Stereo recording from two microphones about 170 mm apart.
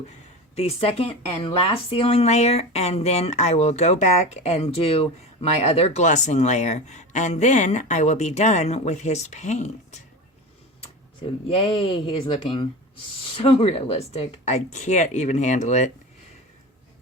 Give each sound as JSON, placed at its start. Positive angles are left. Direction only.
{"t": 0.5, "sound": "speech", "side_deg": 35}
{"t": 11.4, "sound": "speech", "side_deg": 35}